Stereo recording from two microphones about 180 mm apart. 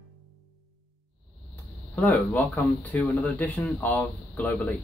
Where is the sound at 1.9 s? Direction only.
10° left (ahead or behind).